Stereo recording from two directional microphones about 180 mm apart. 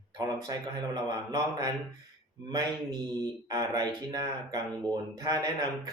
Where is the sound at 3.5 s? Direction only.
20° right (ahead or behind).